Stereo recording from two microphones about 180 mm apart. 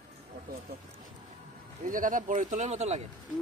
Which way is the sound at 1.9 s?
50° right (ahead or behind).